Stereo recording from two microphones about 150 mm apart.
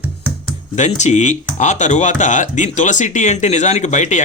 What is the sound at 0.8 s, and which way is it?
Speech, 50° left (ahead or behind).